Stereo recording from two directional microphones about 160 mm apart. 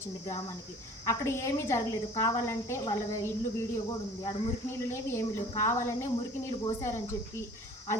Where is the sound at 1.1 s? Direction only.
15° left (ahead or behind).